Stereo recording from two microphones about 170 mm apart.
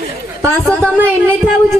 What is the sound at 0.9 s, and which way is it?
Speech, 10° right (ahead or behind).